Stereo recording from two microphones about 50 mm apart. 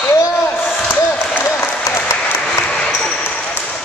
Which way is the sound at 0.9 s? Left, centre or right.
Left.